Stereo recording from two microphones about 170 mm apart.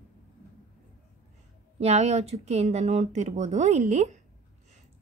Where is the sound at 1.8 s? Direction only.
40° right (ahead or behind).